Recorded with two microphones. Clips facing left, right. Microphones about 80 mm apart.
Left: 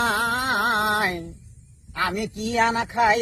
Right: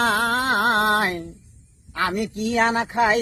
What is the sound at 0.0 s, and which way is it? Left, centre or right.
Music, right.